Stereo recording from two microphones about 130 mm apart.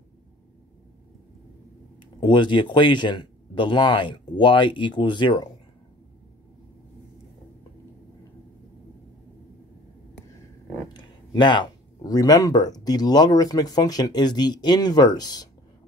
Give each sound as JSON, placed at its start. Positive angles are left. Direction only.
{"t": 2.1, "sound": "speech", "side_deg": 35}
{"t": 10.9, "sound": "speech", "side_deg": 35}